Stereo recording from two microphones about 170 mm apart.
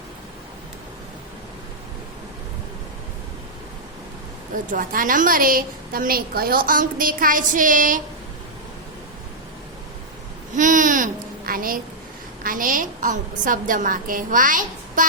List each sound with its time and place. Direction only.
4.5 s a woman's voice: 50° right (ahead or behind)
10.5 s babbling: 50° right (ahead or behind)
12.4 s a woman's voice: 55° right (ahead or behind)